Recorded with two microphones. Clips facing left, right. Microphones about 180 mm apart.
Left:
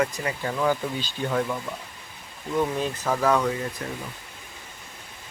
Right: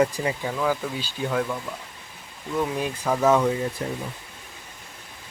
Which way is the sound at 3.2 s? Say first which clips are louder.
Right 4 dB; 20° right (ahead or behind).